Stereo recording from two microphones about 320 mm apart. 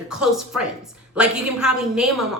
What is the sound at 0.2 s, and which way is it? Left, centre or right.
A woman's voice, centre.